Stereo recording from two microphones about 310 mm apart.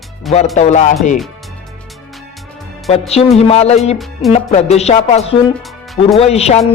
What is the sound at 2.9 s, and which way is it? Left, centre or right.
Speech, centre.